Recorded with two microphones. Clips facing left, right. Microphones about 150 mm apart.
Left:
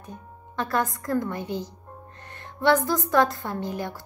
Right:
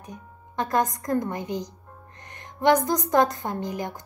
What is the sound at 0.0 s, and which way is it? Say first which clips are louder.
A woman's voice: even; 15° right (ahead or behind).